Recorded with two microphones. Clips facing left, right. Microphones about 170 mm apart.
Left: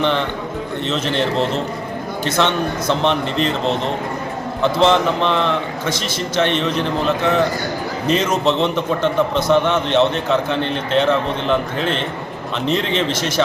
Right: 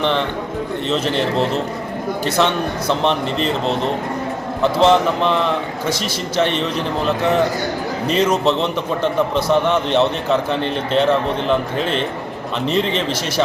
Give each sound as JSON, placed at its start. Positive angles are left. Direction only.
{"t": 0.0, "sound": "a man's voice", "side_deg": 0}
{"t": 8.4, "sound": "a man's voice", "side_deg": 0}